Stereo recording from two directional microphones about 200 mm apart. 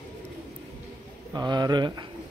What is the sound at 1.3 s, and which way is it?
Speech, 20° right (ahead or behind).